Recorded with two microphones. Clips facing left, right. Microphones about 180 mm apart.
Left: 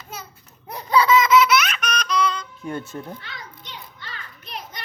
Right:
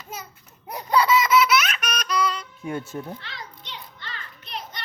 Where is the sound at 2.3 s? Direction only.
5° right (ahead or behind).